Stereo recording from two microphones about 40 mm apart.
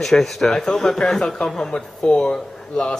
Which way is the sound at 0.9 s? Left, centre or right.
Centre.